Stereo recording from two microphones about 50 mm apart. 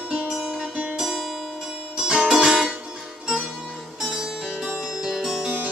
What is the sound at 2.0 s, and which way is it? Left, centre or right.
Music, centre.